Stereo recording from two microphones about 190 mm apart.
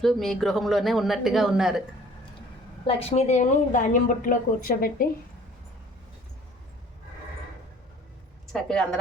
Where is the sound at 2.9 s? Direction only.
30° left (ahead or behind); by 5.1 s 50° left (ahead or behind).